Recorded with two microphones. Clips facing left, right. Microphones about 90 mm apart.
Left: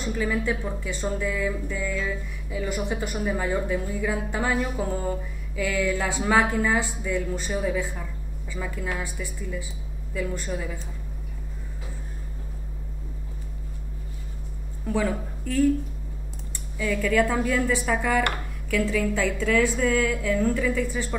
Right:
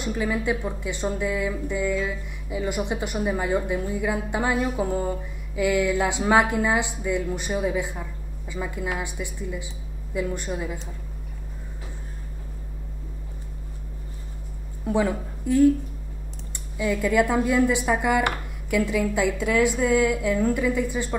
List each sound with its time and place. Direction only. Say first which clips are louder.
0.0 s speech: right 1 dB; 15° right (ahead or behind)
14.9 s a woman's voice: right 2 dB; 15° right (ahead or behind)